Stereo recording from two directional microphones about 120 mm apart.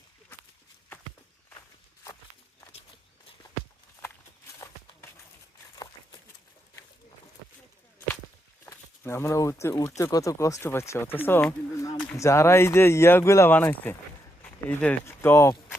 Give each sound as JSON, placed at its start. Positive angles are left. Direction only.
{"t": 7.9, "sound": "whip", "side_deg": 20}
{"t": 8.6, "sound": "speech", "side_deg": 20}
{"t": 11.8, "sound": "a sound", "side_deg": 30}
{"t": 12.1, "sound": "speech", "side_deg": 25}